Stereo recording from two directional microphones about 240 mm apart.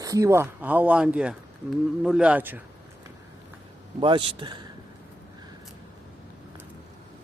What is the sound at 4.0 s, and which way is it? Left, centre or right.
Speech, centre.